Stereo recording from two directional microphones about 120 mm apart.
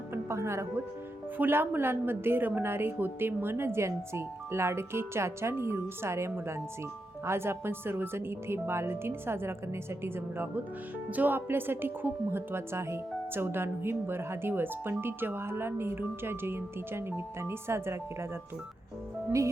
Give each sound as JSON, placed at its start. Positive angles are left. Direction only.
{"t": 0.1, "sound": "speech", "side_deg": -20}